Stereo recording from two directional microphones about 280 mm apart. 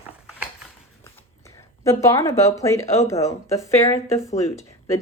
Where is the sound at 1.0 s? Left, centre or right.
Centre.